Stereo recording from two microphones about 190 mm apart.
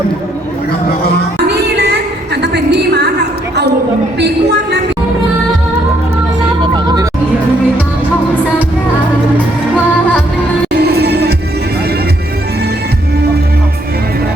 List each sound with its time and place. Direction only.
1.5 s music: 60° right (ahead or behind)
6.6 s music: 20° right (ahead or behind)
10.7 s music: 55° right (ahead or behind)